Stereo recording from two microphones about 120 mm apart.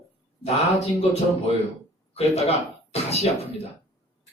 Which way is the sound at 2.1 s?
60° left (ahead or behind).